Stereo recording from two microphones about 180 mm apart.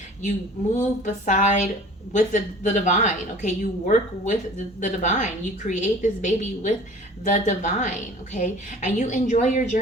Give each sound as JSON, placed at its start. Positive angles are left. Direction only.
{"t": 0.2, "sound": "a woman's voice", "side_deg": 40}